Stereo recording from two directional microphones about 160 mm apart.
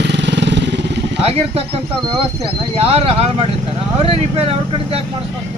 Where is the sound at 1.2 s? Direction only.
40° right (ahead or behind).